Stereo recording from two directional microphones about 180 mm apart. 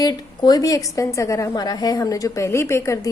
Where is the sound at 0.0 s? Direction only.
20° left (ahead or behind).